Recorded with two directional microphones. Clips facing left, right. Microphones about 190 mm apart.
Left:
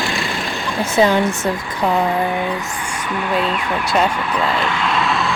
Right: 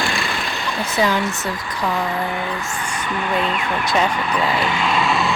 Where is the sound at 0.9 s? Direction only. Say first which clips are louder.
Left 5 dB; 25° left (ahead or behind).